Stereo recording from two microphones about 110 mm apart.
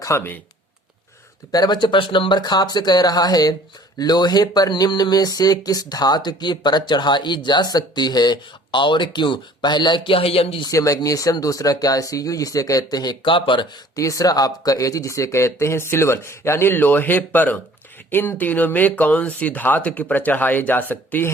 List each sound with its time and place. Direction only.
0.1 s speech: 25° left (ahead or behind)
1.5 s speech: 40° left (ahead or behind); by 10.7 s 60° left (ahead or behind)
10.7 s speech: 30° left (ahead or behind); by 13.7 s 50° left (ahead or behind)
13.9 s speech: 30° left (ahead or behind)